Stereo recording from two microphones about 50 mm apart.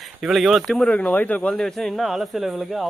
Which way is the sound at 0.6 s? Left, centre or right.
Centre.